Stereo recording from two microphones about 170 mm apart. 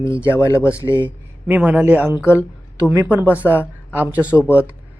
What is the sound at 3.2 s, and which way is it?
Speech, 15° left (ahead or behind).